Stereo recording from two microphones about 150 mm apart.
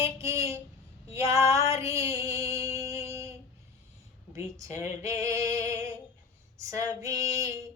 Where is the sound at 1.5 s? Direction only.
20° right (ahead or behind).